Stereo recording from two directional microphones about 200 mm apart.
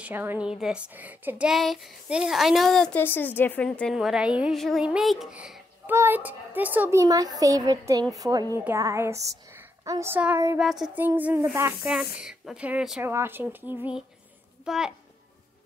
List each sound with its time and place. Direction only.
0.0 s a woman's voice: 10° right (ahead or behind)
10.6 s a woman's voice: centre (ahead or behind)